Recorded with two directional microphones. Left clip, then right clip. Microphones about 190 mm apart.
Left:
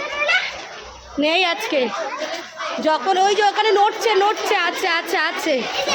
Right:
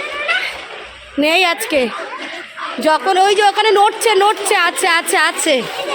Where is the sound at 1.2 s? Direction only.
50° right (ahead or behind); by 5.6 s 35° right (ahead or behind).